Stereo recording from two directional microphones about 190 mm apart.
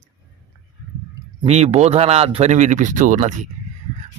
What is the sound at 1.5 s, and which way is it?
A man's voice, 35° right (ahead or behind).